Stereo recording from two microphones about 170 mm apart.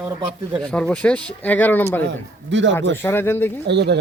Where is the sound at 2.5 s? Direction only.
90° right.